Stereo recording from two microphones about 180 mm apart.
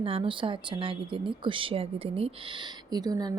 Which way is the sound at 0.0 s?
30° right (ahead or behind).